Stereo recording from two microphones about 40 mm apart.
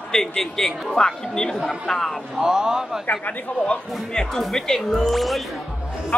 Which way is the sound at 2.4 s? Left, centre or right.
Centre.